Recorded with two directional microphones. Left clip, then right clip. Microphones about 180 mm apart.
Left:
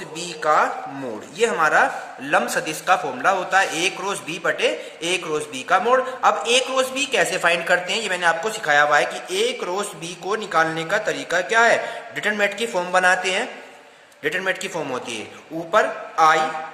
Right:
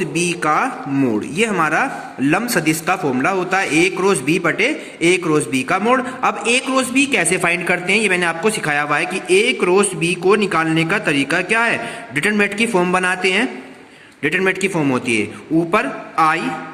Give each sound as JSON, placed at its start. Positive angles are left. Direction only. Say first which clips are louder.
{"t": 0.0, "sound": "a man's voice", "louder": "right 6 dB", "side_deg": -20}